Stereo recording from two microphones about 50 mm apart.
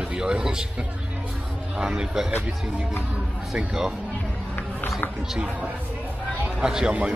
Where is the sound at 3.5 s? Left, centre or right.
Centre.